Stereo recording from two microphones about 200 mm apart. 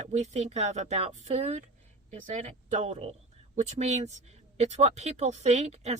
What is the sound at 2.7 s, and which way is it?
Speech, 35° right (ahead or behind).